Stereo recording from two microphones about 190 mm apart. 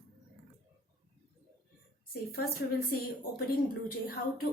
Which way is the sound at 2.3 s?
55° left (ahead or behind).